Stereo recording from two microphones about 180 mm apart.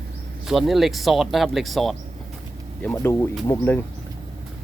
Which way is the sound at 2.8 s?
10° left (ahead or behind).